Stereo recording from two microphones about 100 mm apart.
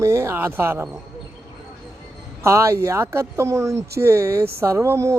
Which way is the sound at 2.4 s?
30° right (ahead or behind).